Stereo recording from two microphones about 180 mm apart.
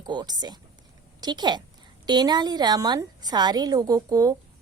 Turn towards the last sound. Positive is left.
turn(degrees=-20)  # may be behind; listen again after turning